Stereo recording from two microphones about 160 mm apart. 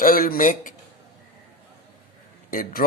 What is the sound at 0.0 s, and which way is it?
Speech, 60° left (ahead or behind).